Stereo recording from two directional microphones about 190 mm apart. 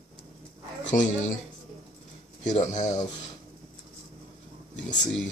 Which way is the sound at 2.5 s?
40° left (ahead or behind).